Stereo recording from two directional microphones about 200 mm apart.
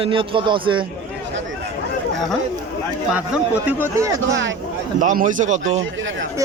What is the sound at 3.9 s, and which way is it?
Speech, 15° right (ahead or behind).